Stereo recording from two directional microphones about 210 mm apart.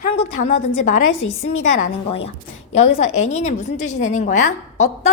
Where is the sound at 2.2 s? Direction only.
30° left (ahead or behind).